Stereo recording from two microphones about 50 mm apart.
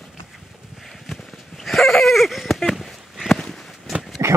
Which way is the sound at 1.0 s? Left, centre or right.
Centre.